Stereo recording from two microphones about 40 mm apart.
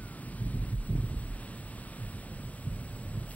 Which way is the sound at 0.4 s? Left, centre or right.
Left.